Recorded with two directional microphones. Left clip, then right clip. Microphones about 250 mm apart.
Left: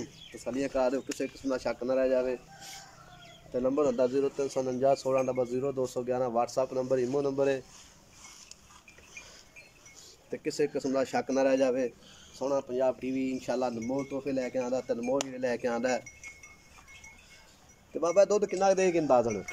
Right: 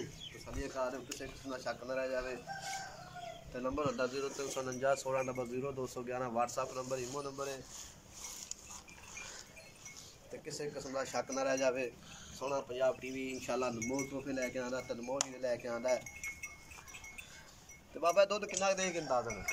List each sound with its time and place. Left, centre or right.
0.7 s speech: left
3.5 s speech: left
10.4 s speech: left
15.1 s speech: left
18.0 s speech: left